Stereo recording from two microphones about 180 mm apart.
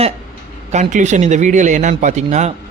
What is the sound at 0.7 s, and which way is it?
Speech, 40° right (ahead or behind).